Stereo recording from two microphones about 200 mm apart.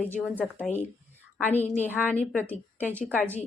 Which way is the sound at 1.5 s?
35° left (ahead or behind).